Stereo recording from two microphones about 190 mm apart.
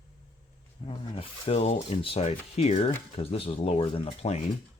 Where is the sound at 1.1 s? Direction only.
35° left (ahead or behind).